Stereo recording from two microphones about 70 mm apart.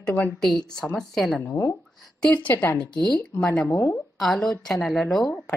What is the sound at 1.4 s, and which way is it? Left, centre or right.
Speech, left.